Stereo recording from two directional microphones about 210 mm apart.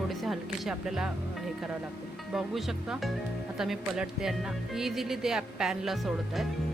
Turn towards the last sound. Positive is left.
turn(degrees=0)  # may be behind; listen again after turning